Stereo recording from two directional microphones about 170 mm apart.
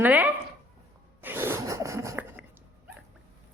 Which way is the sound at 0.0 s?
10° right (ahead or behind).